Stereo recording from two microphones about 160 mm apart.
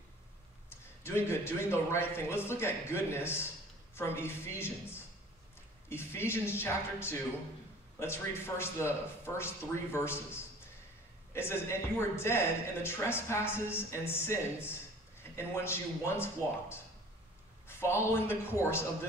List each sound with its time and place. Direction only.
1.0 s speech: 15° left (ahead or behind)